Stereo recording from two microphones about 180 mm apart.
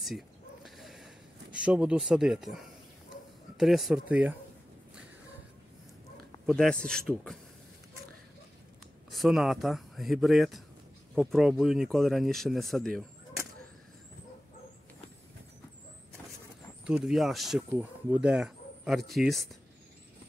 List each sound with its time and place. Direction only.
0.7 s a sound: centre (ahead or behind)
3.5 s speech: centre (ahead or behind)
6.4 s speech: 5° left (ahead or behind)
9.1 s speech: centre (ahead or behind)
16.8 s speech: centre (ahead or behind)